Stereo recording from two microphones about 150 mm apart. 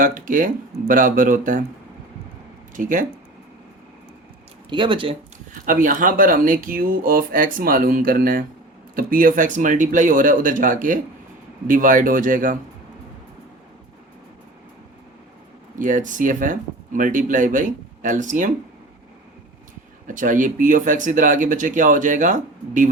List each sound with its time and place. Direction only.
0.0 s speech: 60° right (ahead or behind)
2.7 s speech: 60° right (ahead or behind)
4.7 s speech: 30° right (ahead or behind)
5.6 s speech: 65° right (ahead or behind)
15.8 s speech: 60° right (ahead or behind)
20.1 s speech: 60° right (ahead or behind)